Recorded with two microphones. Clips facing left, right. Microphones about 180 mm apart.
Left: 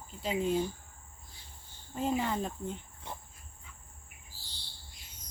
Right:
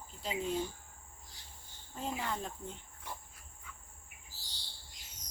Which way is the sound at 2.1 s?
20° left (ahead or behind).